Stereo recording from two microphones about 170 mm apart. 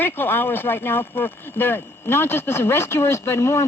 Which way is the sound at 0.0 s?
10° left (ahead or behind).